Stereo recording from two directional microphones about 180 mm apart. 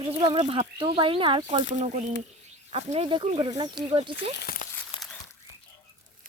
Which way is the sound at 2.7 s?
35° right (ahead or behind).